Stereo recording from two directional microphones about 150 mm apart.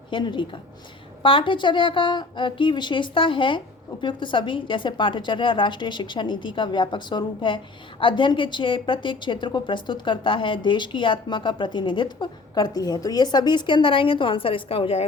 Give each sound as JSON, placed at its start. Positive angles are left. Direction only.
{"t": 0.1, "sound": "a woman's voice", "side_deg": 30}